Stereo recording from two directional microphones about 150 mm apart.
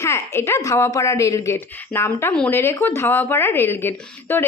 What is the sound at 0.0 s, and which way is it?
A woman's voice, 15° left (ahead or behind).